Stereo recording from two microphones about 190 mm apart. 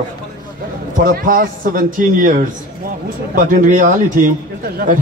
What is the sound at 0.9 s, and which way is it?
A man's voice, 45° right (ahead or behind).